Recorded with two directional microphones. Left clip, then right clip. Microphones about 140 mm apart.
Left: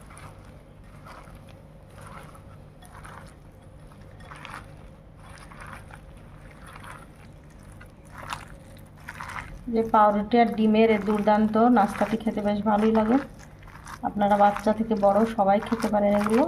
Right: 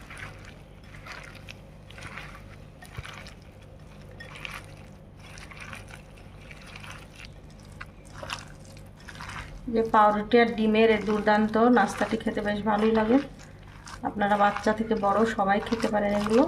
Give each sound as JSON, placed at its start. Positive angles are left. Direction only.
{"t": 9.7, "sound": "speech", "side_deg": 25}
{"t": 12.9, "sound": "speech", "side_deg": 35}
{"t": 13.9, "sound": "speech", "side_deg": 20}
{"t": 16.1, "sound": "speech", "side_deg": 40}